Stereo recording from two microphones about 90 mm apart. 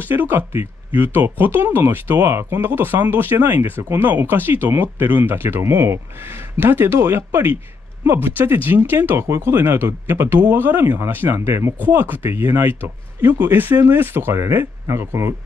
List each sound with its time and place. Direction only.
0.0 s speech: 25° right (ahead or behind)